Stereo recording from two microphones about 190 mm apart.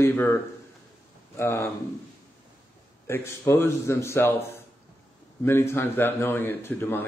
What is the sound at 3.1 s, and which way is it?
A man's voice, 10° left (ahead or behind).